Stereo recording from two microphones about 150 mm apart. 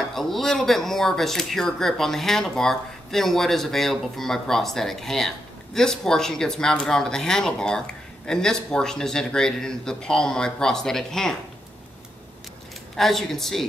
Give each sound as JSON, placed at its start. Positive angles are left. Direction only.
{"t": 0.0, "sound": "speech", "side_deg": 0}
{"t": 12.9, "sound": "speech", "side_deg": 0}